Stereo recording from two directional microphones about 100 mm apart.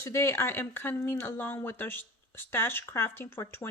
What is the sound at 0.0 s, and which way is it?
Speech, 25° left (ahead or behind).